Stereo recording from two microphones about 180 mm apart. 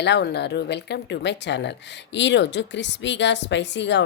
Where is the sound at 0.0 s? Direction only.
70° left (ahead or behind).